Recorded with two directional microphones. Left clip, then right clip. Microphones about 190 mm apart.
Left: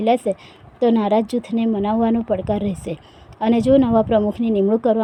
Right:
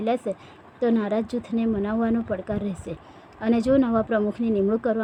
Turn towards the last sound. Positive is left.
turn(degrees=15)  # may be behind; listen again after turning